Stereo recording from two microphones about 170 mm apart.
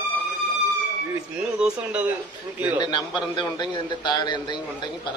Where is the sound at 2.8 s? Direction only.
25° left (ahead or behind).